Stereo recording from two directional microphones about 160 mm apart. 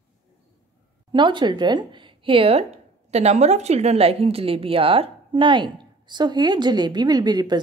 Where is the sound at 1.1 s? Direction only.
30° right (ahead or behind).